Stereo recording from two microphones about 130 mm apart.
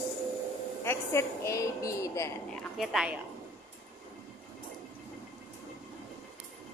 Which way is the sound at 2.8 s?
5° right (ahead or behind).